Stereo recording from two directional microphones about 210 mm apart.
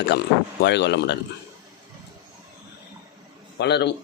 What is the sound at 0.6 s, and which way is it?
Speech, 55° left (ahead or behind).